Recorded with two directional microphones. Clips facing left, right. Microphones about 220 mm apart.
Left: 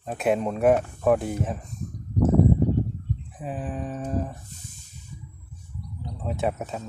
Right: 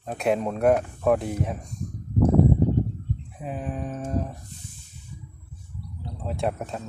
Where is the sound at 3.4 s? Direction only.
Centre (ahead or behind).